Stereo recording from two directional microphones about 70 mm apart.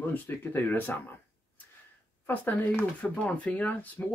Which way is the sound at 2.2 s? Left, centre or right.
Left.